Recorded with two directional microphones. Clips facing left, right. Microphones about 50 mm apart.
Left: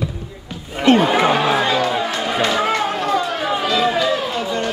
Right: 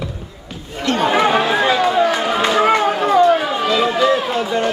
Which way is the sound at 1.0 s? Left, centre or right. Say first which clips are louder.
Right 1 dB; centre.